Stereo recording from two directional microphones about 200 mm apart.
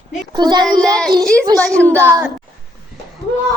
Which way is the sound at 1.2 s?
5° left (ahead or behind).